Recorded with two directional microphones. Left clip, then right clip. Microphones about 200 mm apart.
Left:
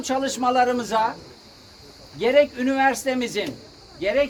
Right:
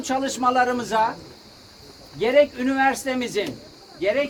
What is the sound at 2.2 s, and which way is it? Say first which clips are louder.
Speech: even; 45° left (ahead or behind).